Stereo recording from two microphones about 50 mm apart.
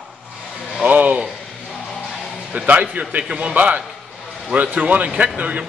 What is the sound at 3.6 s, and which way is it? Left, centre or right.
Speech, right.